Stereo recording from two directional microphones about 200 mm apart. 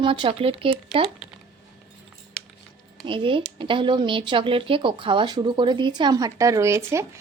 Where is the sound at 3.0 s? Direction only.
25° right (ahead or behind).